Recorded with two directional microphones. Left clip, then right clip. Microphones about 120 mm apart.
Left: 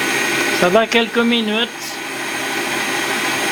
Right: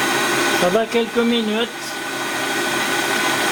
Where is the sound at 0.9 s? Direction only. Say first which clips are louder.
Left 3 dB; 35° left (ahead or behind).